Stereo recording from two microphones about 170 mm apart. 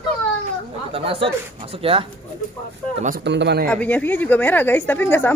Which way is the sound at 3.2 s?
90° right.